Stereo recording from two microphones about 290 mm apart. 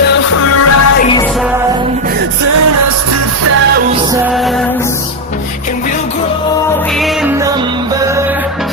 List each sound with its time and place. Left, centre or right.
0.5 s music: left
7.0 s music: centre